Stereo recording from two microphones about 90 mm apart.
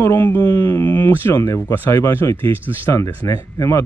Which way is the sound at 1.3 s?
35° left (ahead or behind).